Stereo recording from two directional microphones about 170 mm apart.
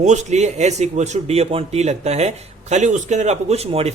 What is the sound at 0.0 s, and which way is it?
Speech, 45° right (ahead or behind).